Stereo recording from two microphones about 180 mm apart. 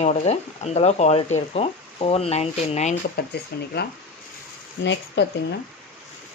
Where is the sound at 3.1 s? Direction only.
65° left (ahead or behind).